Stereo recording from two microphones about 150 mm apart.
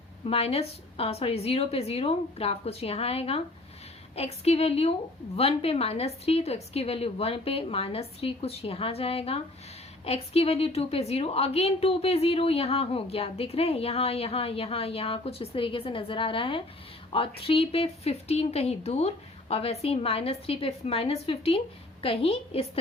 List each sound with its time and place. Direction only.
0.3 s a woman's voice: 40° left (ahead or behind)